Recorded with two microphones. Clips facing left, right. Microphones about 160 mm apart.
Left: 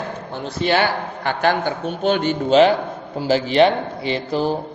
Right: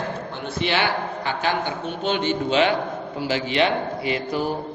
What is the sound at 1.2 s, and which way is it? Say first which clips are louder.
A man's voice: left 7 dB; 50° left (ahead or behind).